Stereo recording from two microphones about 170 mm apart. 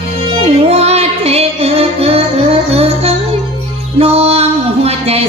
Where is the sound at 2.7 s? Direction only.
40° right (ahead or behind).